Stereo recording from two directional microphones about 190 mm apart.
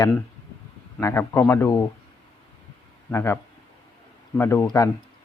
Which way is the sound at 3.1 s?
15° left (ahead or behind).